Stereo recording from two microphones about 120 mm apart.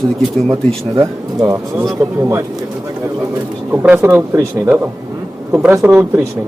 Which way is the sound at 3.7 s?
15° right (ahead or behind).